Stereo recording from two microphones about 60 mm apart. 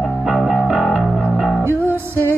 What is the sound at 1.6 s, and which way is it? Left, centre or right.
Music, right.